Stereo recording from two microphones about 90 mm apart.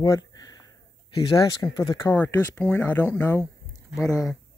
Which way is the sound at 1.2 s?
45° left (ahead or behind).